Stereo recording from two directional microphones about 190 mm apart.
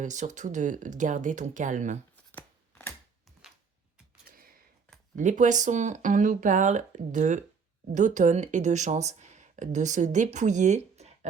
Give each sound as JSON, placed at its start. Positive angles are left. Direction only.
{"t": 0.0, "sound": "speech", "side_deg": -40}
{"t": 2.3, "sound": "scissors", "side_deg": 10}
{"t": 5.1, "sound": "speech", "side_deg": -40}